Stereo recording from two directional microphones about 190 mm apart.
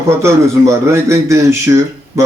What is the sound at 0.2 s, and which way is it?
A man's voice, 15° right (ahead or behind).